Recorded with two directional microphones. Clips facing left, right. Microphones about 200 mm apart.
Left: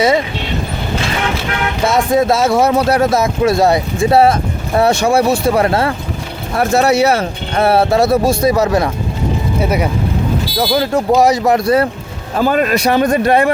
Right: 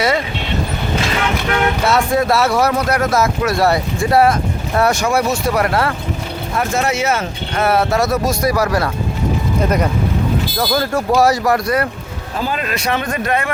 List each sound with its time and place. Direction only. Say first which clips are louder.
1.9 s speech: left 5 dB; 20° left (ahead or behind)
6.6 s speech: left 7 dB; 35° left (ahead or behind)
9.6 s speech: left 1 dB; 10° left (ahead or behind); by 11.9 s 30° left (ahead or behind)
12.4 s speech: left 8 dB; 50° left (ahead or behind)